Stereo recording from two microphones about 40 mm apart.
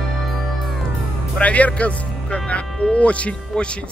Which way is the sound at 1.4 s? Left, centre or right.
Left.